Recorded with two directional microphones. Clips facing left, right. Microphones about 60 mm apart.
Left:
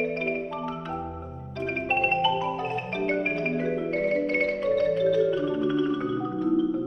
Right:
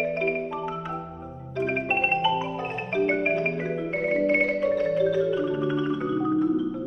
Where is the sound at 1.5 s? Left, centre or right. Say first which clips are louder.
Right 2 dB; centre.